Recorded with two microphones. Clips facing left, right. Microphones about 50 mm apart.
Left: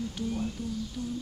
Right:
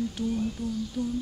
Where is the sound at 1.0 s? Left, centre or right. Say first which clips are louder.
Right 6 dB; centre.